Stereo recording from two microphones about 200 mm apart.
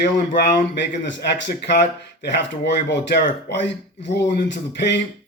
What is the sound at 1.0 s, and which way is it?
Speech, 60° left (ahead or behind).